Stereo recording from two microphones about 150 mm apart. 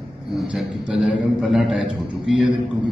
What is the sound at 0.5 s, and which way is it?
A man's voice, 5° right (ahead or behind).